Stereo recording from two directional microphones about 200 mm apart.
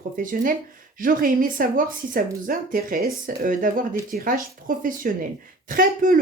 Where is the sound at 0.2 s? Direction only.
45° right (ahead or behind).